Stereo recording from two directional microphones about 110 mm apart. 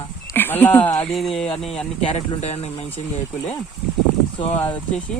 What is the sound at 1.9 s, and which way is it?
Speech, 65° left (ahead or behind).